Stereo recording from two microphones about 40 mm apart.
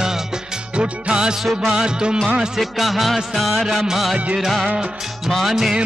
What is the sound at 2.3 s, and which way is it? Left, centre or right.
Music of bollywood, centre.